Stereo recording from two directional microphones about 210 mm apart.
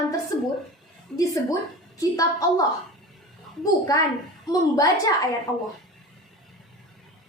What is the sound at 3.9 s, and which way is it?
Speech, 15° left (ahead or behind).